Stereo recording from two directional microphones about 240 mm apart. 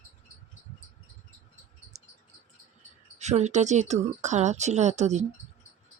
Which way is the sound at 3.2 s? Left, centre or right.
Right.